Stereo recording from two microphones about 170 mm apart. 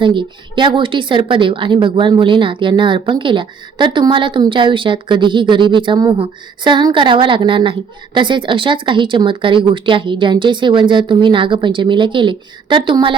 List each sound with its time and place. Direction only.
0.0 s a woman's voice: 30° right (ahead or behind)